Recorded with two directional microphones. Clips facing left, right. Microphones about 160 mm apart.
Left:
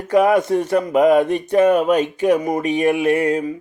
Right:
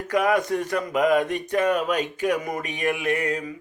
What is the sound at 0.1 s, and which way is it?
Speech, 30° left (ahead or behind).